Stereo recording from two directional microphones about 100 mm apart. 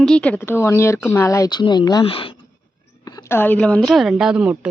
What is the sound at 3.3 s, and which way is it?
Speech, 20° left (ahead or behind).